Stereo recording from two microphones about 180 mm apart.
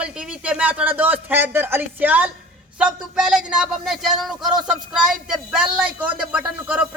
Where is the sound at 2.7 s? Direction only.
5° right (ahead or behind).